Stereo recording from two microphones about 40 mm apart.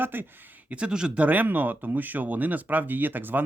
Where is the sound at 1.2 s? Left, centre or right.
Right.